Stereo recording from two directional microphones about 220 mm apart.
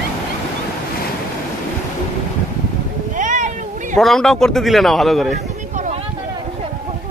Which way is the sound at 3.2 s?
35° right (ahead or behind).